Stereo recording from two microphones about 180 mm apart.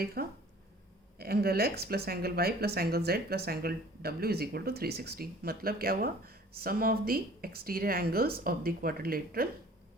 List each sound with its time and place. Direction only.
0.0 s speech: 60° right (ahead or behind)